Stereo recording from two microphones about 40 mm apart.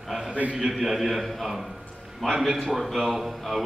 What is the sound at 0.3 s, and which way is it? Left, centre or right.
Speech, right.